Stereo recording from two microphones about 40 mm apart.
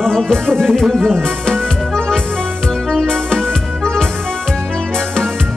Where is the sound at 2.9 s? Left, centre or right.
Centre.